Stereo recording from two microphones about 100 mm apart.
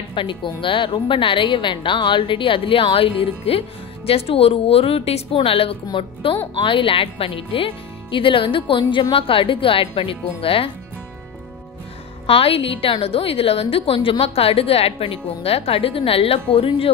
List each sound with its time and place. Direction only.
0.1 s a woman's voice: 55° left (ahead or behind)
12.3 s a woman's voice: 70° left (ahead or behind)